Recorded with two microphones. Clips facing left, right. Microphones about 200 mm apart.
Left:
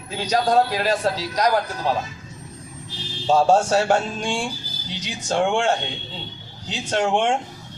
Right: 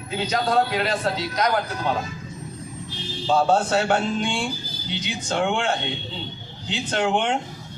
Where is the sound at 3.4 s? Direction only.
40° left (ahead or behind).